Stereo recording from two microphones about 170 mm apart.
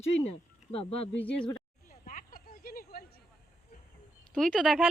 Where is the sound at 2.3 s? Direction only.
60° left (ahead or behind).